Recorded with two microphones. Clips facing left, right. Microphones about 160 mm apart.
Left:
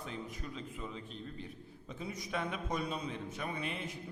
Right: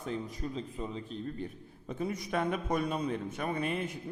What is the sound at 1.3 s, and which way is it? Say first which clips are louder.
A man's voice: right 6 dB; 50° right (ahead or behind).